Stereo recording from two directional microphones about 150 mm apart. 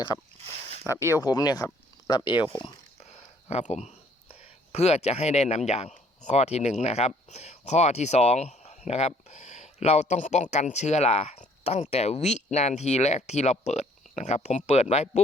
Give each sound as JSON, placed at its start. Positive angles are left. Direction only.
{"t": 0.4, "sound": "a sound", "side_deg": -40}
{"t": 0.9, "sound": "speech", "side_deg": 20}
{"t": 3.5, "sound": "speech", "side_deg": 50}